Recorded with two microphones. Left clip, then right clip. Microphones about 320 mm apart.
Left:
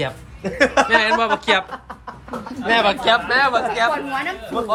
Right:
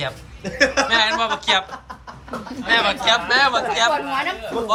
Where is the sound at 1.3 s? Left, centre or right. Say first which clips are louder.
Left 1 dB; centre.